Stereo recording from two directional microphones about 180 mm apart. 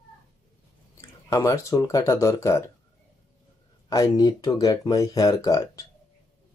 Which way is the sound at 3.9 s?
20° left (ahead or behind).